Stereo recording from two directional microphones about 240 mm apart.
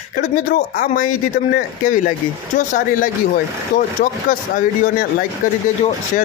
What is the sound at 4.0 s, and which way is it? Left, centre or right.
Speech, left.